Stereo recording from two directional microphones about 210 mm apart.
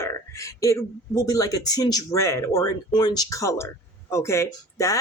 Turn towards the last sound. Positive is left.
turn(degrees=15)  # may be behind; listen again after turning